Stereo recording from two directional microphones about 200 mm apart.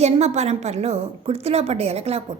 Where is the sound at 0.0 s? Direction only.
35° right (ahead or behind).